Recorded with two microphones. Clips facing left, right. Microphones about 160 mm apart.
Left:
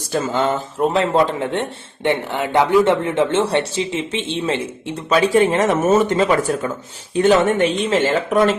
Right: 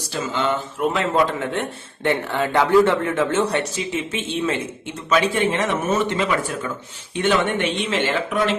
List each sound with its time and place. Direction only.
0.1 s speech: 45° left (ahead or behind)